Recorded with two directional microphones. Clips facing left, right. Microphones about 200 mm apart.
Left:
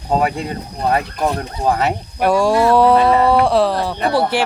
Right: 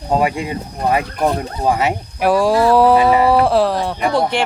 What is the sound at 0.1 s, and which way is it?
Speech, 5° right (ahead or behind).